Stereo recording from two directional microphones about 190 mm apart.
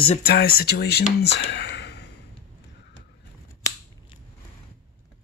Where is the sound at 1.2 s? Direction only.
65° left (ahead or behind).